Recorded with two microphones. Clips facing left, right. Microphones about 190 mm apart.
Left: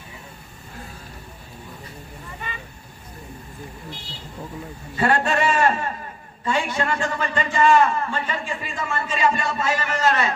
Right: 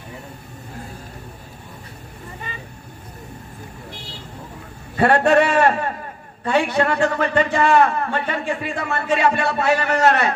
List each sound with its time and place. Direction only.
2.5 s vehicle: 35° right (ahead or behind)
4.9 s a sound: 60° right (ahead or behind)
6.4 s a man's voice: 60° right (ahead or behind)